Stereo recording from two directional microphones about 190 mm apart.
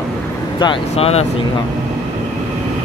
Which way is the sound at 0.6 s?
30° left (ahead or behind).